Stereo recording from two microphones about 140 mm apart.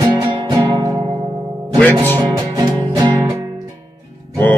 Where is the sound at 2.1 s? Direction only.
25° right (ahead or behind).